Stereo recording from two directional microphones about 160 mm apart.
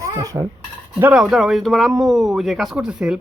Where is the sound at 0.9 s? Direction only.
5° right (ahead or behind).